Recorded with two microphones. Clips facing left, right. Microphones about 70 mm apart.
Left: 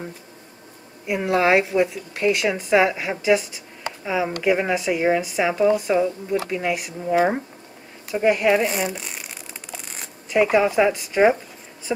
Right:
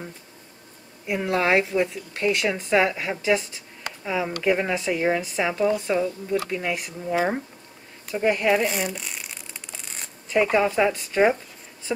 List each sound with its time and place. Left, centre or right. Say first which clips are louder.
1.0 s a woman's voice: left 3 dB; centre
8.1 s speech: left 3 dB; left
8.5 s a sound: left 3 dB; centre
10.3 s a woman's voice: left 3 dB; centre